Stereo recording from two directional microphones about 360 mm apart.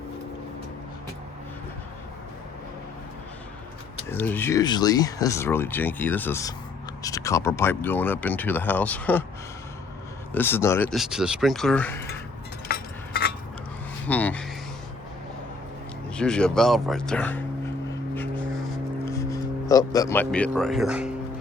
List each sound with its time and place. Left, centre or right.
4.1 s speech: centre
10.3 s speech: centre
12.6 s a sound: left
14.1 s speech: centre
16.1 s speech: centre
18.1 s a sound: centre